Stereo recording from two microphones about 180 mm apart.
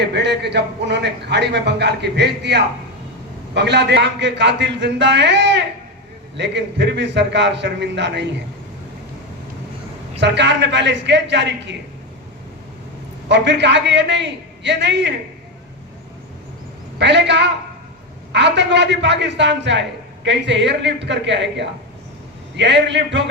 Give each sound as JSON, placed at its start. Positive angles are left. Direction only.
{"t": 0.0, "sound": "speech", "side_deg": -70}
{"t": 10.2, "sound": "speech", "side_deg": -75}
{"t": 13.2, "sound": "speech", "side_deg": -75}
{"t": 17.0, "sound": "speech", "side_deg": -75}